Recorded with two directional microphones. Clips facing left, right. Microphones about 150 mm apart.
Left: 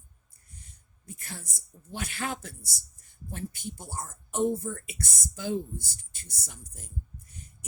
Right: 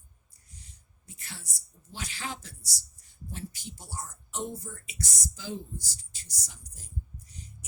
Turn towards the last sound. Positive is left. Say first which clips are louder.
# right 1 dB
turn(degrees=55)  # may be behind; listen again after turning